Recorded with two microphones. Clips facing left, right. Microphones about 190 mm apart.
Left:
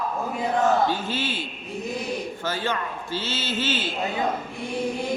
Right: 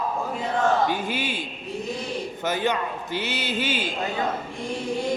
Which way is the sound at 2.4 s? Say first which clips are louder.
Right 4 dB; 20° right (ahead or behind).